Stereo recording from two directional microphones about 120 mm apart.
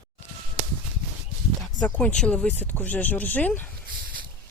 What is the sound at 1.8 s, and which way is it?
Speech, 10° left (ahead or behind).